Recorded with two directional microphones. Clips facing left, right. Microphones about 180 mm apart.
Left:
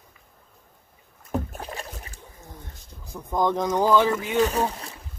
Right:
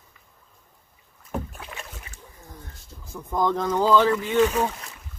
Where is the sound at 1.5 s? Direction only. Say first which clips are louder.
Left 4 dB; 40° left (ahead or behind).